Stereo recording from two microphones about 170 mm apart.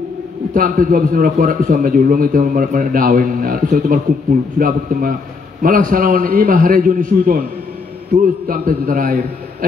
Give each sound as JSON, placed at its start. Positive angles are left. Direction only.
{"t": 0.6, "sound": "a man's voice", "side_deg": -55}
{"t": 8.5, "sound": "a man's voice", "side_deg": -55}